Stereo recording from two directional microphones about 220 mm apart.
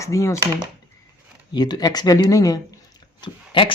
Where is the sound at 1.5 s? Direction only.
20° left (ahead or behind).